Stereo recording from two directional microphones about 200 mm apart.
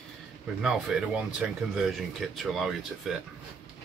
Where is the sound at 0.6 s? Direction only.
Centre (ahead or behind).